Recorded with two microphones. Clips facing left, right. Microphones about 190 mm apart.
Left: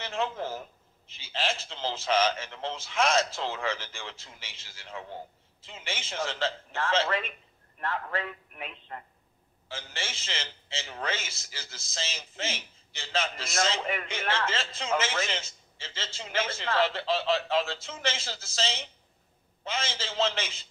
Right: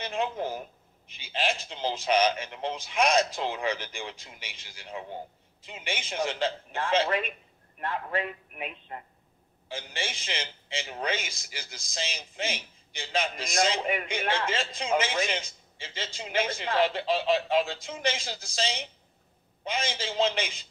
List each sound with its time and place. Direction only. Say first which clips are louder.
0.0 s a man's voice: right 2 dB; 15° right (ahead or behind)